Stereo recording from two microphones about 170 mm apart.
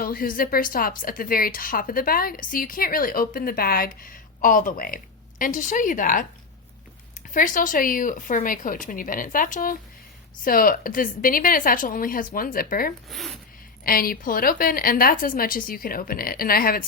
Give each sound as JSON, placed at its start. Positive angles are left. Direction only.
{"t": 0.0, "sound": "speech", "side_deg": 55}
{"t": 7.3, "sound": "a woman's voice", "side_deg": 50}
{"t": 13.1, "sound": "speech", "side_deg": 0}
{"t": 13.8, "sound": "speech", "side_deg": 60}